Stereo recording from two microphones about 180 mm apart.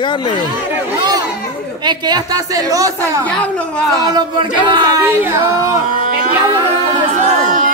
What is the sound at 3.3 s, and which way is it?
Speech, 5° left (ahead or behind).